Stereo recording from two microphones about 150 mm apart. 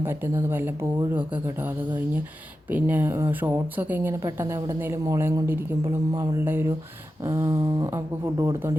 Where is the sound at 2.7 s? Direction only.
10° right (ahead or behind).